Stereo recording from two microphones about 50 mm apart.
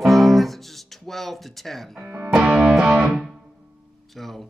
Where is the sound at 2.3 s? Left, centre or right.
Centre.